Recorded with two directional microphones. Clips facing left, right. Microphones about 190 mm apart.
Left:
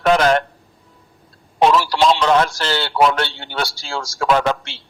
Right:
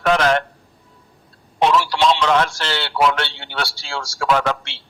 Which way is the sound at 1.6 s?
40° left (ahead or behind).